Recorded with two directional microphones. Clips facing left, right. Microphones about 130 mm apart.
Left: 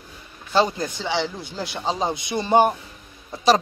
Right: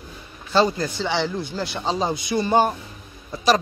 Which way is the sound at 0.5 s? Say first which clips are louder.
Right 1 dB; 15° left (ahead or behind).